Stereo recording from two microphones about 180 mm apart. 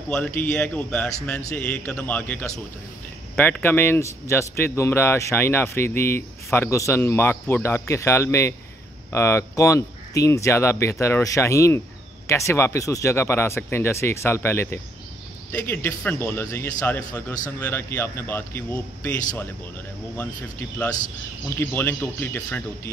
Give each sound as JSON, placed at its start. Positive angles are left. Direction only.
{"t": 0.1, "sound": "a man's voice", "side_deg": 10}
{"t": 21.5, "sound": "speech", "side_deg": 10}